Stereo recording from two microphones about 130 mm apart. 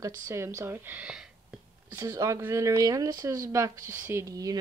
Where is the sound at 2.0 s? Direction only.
25° right (ahead or behind).